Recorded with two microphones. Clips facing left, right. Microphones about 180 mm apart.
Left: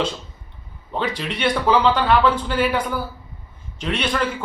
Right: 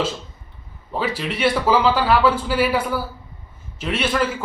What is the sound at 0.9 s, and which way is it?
A man's voice, 5° right (ahead or behind).